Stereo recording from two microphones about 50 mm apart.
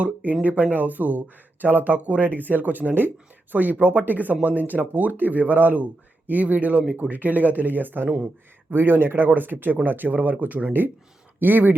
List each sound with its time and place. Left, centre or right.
0.0 s speech: right
10.7 s speech: right